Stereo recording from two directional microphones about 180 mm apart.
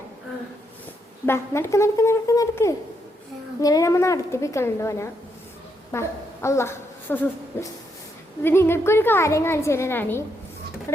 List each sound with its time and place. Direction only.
1.2 s a woman's voice: 15° left (ahead or behind)